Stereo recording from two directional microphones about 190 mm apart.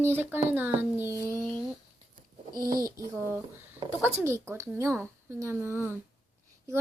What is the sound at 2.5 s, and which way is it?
Speech, 50° right (ahead or behind).